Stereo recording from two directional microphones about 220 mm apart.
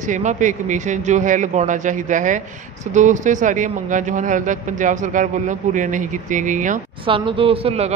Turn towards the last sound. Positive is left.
turn(degrees=-25)  # may be behind; listen again after turning